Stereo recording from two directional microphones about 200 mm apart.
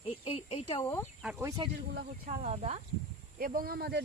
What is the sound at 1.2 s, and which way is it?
Speech, 5° right (ahead or behind).